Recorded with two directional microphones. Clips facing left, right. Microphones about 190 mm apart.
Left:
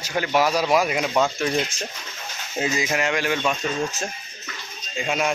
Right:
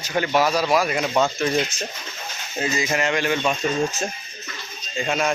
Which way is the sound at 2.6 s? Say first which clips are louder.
Even; 10° left (ahead or behind).